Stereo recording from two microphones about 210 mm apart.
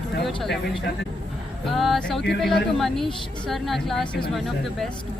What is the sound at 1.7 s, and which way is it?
Speech, centre (ahead or behind).